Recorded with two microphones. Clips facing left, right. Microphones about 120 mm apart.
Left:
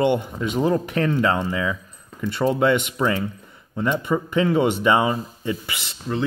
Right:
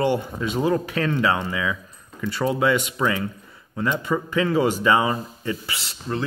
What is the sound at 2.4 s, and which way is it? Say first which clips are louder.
Speech: left 3 dB; 15° left (ahead or behind).